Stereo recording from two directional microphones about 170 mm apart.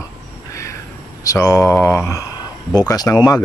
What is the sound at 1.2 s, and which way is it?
Speech, 20° left (ahead or behind).